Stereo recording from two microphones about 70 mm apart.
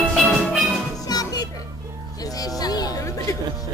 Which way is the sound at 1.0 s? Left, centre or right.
Left.